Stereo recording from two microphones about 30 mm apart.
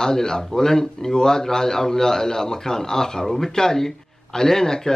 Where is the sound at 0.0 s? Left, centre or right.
Left.